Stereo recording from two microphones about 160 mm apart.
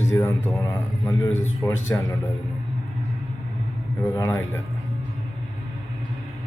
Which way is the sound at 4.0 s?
20° left (ahead or behind).